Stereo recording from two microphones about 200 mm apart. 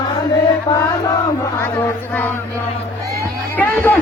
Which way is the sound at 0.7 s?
15° left (ahead or behind).